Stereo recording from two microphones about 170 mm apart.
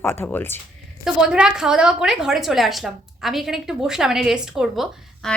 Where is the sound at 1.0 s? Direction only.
5° right (ahead or behind).